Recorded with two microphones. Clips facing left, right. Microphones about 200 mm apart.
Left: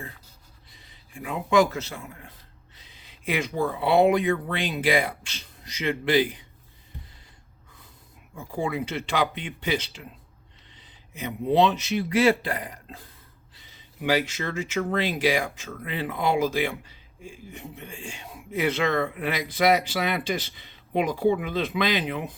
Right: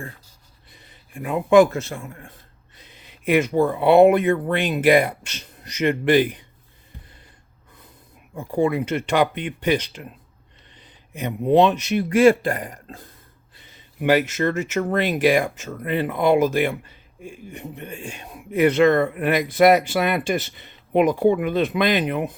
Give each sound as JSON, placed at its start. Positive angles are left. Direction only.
{"t": 0.7, "sound": "a man's voice", "side_deg": -60}
{"t": 8.4, "sound": "a man's voice", "side_deg": -55}